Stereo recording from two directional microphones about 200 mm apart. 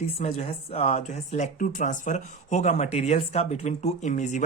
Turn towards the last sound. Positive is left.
turn(degrees=35)  # may be behind; listen again after turning